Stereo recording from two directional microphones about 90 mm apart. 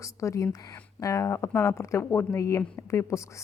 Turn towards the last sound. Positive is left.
turn(degrees=30)  # may be behind; listen again after turning